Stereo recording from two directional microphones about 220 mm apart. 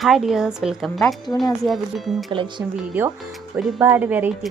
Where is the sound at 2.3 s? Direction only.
20° right (ahead or behind).